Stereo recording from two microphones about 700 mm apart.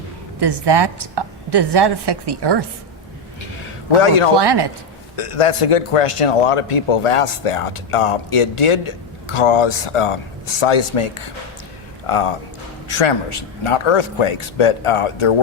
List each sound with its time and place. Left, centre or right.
0.3 s a woman's voice: right
4.0 s a man's voice: left
4.4 s a woman's voice: right
5.1 s a man's voice: left